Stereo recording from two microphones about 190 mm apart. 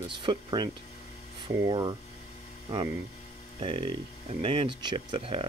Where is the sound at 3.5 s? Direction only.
25° right (ahead or behind).